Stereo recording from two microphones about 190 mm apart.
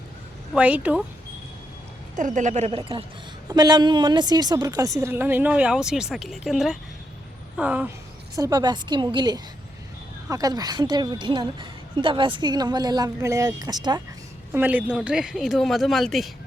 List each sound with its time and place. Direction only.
0.5 s a woman's voice: 5° right (ahead or behind)
2.1 s a woman's voice: 40° right (ahead or behind)
3.5 s a woman's voice: 20° right (ahead or behind)
8.4 s a woman's voice: 20° right (ahead or behind)
14.5 s speech: 10° right (ahead or behind)